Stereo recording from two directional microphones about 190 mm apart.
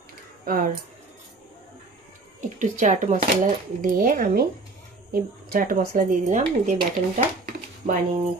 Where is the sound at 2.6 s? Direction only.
40° right (ahead or behind).